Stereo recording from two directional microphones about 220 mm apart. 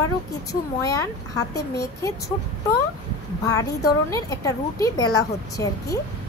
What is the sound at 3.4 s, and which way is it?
A woman's voice, 15° left (ahead or behind).